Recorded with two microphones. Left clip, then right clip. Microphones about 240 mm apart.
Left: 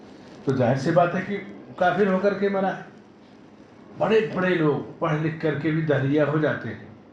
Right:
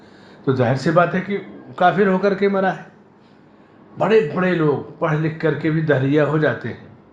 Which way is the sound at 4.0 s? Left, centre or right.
Right.